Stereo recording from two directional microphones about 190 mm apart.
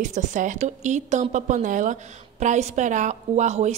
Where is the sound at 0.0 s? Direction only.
40° right (ahead or behind).